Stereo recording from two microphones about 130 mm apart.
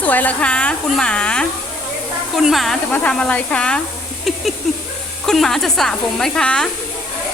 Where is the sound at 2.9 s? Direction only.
10° left (ahead or behind).